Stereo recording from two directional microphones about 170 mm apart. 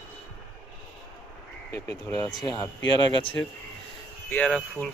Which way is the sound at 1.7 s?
15° left (ahead or behind).